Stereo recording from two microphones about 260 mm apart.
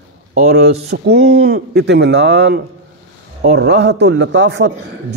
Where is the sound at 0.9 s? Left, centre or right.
Right.